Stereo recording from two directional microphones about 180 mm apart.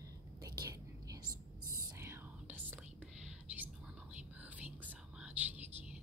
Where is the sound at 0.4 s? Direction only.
20° right (ahead or behind).